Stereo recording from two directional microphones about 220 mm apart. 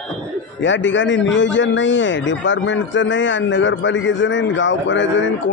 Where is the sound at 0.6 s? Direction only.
55° left (ahead or behind).